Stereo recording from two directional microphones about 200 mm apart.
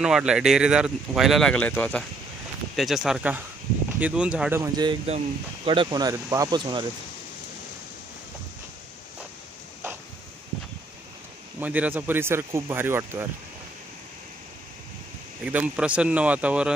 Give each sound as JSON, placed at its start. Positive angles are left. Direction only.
{"t": 0.0, "sound": "speech", "side_deg": -5}
{"t": 4.7, "sound": "speech", "side_deg": -20}
{"t": 11.6, "sound": "speech", "side_deg": -10}
{"t": 15.4, "sound": "speech", "side_deg": -5}